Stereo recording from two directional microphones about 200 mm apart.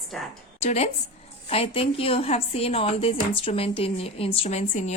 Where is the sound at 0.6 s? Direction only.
35° left (ahead or behind).